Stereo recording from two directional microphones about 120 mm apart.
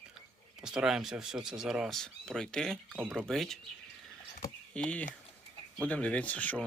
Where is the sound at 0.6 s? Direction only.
5° right (ahead or behind).